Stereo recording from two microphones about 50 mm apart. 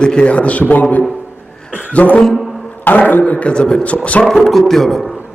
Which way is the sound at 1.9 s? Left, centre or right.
Left.